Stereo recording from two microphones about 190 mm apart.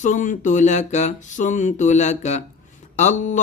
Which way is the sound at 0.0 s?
40° left (ahead or behind).